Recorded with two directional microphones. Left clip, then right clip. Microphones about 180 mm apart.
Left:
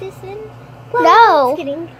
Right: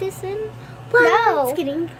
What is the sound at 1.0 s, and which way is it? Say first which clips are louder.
Speech: left 8 dB; 25° left (ahead or behind).